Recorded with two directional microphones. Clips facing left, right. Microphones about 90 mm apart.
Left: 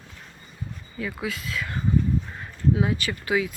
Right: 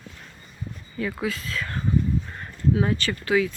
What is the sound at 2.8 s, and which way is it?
Speech, 10° left (ahead or behind).